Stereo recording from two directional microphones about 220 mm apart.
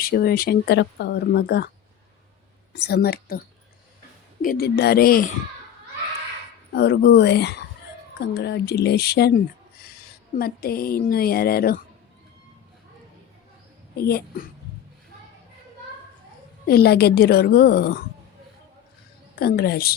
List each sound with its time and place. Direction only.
0.0 s speech: 45° left (ahead or behind)
2.7 s speech: 45° left (ahead or behind)
4.4 s speech: 45° left (ahead or behind)
6.7 s speech: 50° left (ahead or behind)
14.0 s speech: 45° left (ahead or behind)
16.6 s speech: 45° left (ahead or behind)
19.4 s speech: 45° left (ahead or behind)